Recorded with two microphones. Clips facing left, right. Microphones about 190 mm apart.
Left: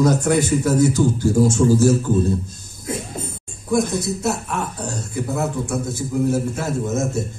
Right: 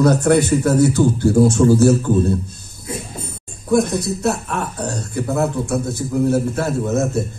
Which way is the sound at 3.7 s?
60° right (ahead or behind).